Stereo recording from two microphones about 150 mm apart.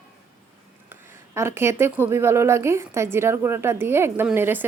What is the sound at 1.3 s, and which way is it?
A woman's voice, 15° right (ahead or behind).